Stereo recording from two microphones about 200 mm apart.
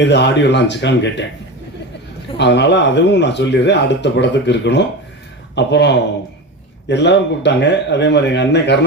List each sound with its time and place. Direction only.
0.0 s speech: 60° left (ahead or behind)
2.4 s speech: 60° left (ahead or behind)